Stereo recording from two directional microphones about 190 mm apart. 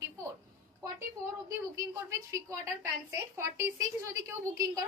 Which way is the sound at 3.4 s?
15° right (ahead or behind).